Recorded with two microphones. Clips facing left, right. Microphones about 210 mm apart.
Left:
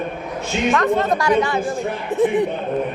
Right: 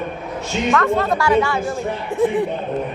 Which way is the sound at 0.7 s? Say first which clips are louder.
Even; 20° left (ahead or behind).